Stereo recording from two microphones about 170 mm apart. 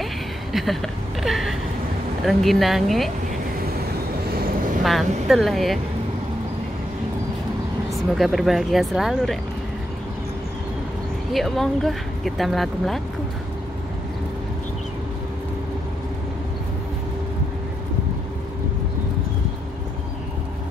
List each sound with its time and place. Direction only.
0.0 s a sound: centre (ahead or behind)
1.2 s speech: centre (ahead or behind)
4.8 s speech: centre (ahead or behind)
7.9 s speech: centre (ahead or behind)
11.3 s speech: centre (ahead or behind)